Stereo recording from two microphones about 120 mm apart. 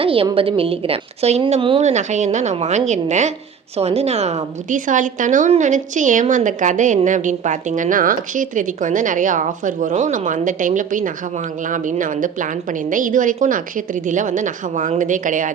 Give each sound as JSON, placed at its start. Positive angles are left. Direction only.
{"t": 0.0, "sound": "a woman's voice", "side_deg": -50}
{"t": 1.8, "sound": "a woman's voice", "side_deg": -75}
{"t": 3.8, "sound": "a woman's voice", "side_deg": -60}